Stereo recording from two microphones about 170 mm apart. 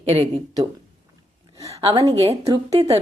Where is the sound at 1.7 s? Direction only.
35° right (ahead or behind).